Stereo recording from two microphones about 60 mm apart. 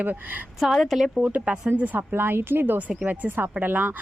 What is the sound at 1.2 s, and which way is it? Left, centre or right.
Speech, right.